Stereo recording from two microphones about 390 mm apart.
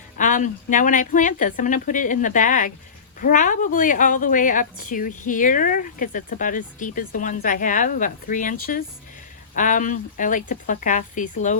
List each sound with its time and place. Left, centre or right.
0.2 s a woman's voice: centre